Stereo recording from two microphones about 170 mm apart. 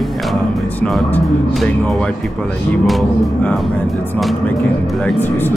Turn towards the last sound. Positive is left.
turn(degrees=10)  # may be behind; listen again after turning